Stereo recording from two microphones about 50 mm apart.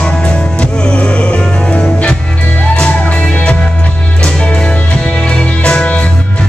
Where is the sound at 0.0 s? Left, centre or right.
Left.